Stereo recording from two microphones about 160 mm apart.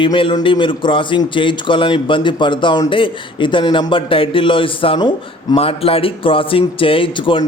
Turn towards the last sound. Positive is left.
turn(degrees=35)  # may be behind; listen again after turning